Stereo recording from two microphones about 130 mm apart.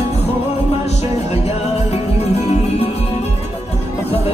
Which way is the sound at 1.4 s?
55° left (ahead or behind).